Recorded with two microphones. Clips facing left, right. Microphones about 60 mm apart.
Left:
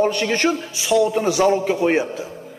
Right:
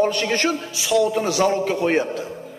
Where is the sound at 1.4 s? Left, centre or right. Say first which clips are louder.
Left 2 dB; centre.